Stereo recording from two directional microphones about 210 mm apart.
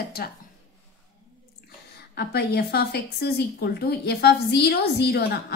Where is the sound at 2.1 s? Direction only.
50° left (ahead or behind).